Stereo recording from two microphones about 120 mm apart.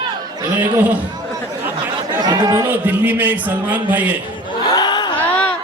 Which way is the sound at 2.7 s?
15° right (ahead or behind).